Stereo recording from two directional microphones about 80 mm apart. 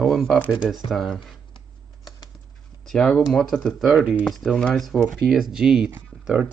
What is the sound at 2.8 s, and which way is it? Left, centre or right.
Speech, centre.